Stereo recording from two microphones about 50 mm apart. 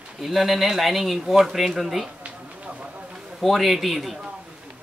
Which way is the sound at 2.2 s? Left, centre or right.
Right.